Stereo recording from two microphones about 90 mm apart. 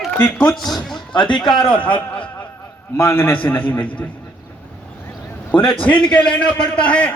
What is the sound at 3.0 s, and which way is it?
Speech, 25° left (ahead or behind).